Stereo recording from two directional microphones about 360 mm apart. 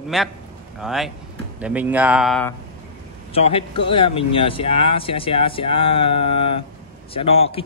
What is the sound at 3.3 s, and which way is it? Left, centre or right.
Speech, centre.